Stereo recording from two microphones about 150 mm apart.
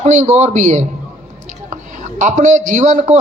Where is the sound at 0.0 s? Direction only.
50° right (ahead or behind).